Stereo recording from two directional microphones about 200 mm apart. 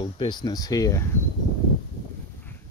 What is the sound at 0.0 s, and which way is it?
Speech, 25° left (ahead or behind).